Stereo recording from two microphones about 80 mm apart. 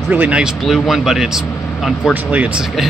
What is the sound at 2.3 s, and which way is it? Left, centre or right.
Speech, centre.